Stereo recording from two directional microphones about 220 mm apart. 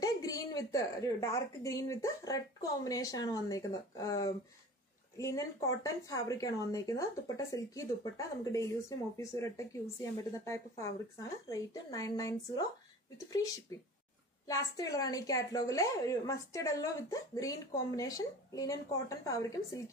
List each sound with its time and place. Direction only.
0.0 s a woman's voice: 15° left (ahead or behind)